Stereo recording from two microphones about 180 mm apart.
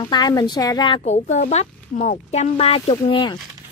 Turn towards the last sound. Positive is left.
turn(degrees=25)  # may be behind; listen again after turning